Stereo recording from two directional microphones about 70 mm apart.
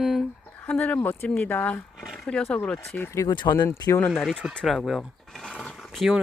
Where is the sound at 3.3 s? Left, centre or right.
Left.